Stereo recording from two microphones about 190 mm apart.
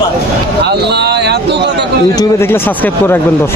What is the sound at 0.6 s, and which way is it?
A man's voice, 60° right (ahead or behind).